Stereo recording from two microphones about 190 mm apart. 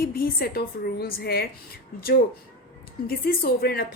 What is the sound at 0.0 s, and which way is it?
A woman's voice, 50° left (ahead or behind).